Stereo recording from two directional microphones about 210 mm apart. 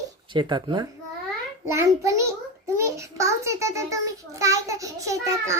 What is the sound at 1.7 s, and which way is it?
A child's voice, 15° right (ahead or behind).